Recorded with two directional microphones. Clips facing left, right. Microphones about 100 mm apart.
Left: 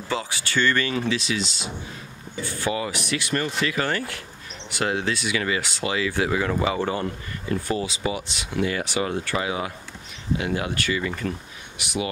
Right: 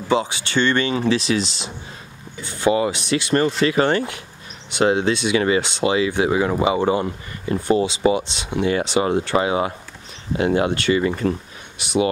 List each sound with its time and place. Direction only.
0.1 s speech: 20° right (ahead or behind)
1.1 s speech: 35° right (ahead or behind)
2.4 s speech: 20° right (ahead or behind)